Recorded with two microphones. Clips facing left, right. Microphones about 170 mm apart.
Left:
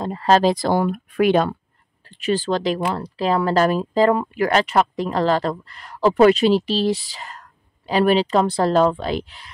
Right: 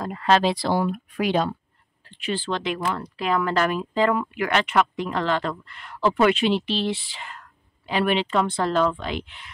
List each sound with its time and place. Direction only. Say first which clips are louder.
0.0 s speech: left 4 dB; 35° left (ahead or behind); by 1.5 s 55° left (ahead or behind)
2.0 s speech: left 6 dB; 40° left (ahead or behind)